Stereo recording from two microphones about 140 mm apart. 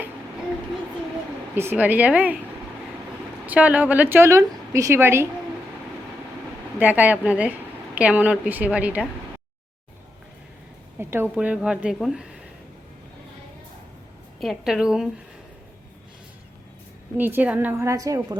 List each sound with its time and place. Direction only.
1.5 s a woman's voice: 15° right (ahead or behind)
3.4 s a woman's voice: 10° right (ahead or behind)
6.7 s a woman's voice: 10° right (ahead or behind)
10.9 s a woman's voice: 15° right (ahead or behind)
14.4 s a woman's voice: centre (ahead or behind)
17.2 s a woman's voice: 15° right (ahead or behind)